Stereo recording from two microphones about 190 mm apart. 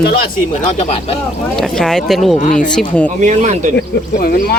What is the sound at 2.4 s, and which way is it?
Speech, 45° left (ahead or behind).